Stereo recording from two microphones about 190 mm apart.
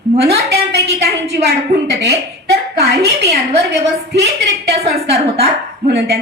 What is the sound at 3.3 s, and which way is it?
A woman's voice, 60° right (ahead or behind).